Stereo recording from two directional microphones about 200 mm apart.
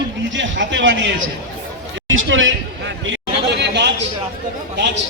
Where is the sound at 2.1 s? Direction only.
70° right (ahead or behind).